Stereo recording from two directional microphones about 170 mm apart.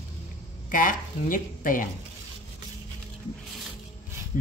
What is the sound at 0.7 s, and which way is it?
A woman's voice, 55° left (ahead or behind).